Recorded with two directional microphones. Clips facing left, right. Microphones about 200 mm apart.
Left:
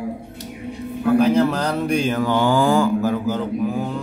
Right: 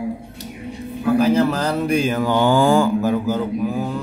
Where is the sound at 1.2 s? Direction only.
Centre (ahead or behind); by 3.1 s 25° right (ahead or behind).